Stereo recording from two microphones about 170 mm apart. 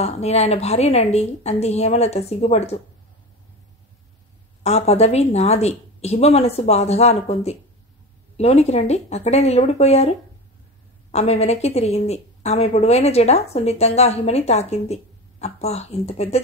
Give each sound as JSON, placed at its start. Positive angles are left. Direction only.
{"t": 0.0, "sound": "a woman's voice", "side_deg": 40}
{"t": 4.6, "sound": "a woman's voice", "side_deg": 40}